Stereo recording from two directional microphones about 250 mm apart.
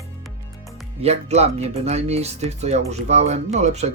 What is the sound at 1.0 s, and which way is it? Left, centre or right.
Speech, right.